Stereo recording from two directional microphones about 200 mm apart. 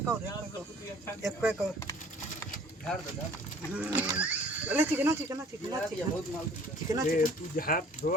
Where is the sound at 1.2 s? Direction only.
5° right (ahead or behind).